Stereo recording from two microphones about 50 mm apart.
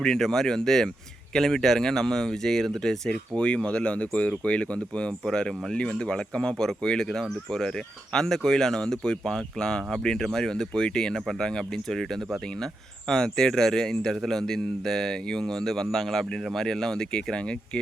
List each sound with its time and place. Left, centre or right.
0.0 s a man's voice: centre
3.1 s speech: centre
5.2 s a man's voice: centre